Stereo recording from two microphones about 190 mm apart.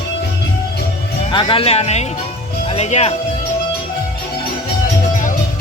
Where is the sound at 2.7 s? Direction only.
35° left (ahead or behind).